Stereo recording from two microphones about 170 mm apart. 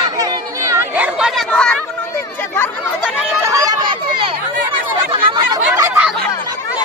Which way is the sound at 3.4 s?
20° right (ahead or behind).